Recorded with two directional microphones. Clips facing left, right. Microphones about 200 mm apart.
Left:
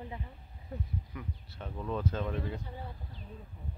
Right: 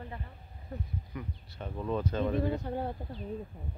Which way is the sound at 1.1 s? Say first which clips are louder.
Right 2 dB; centre (ahead or behind).